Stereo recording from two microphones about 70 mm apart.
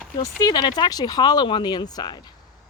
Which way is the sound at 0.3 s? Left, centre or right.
Left.